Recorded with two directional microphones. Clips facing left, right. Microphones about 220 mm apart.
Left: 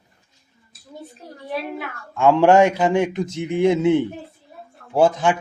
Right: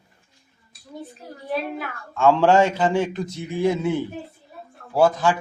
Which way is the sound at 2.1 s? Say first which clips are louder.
Left 3 dB; 15° left (ahead or behind).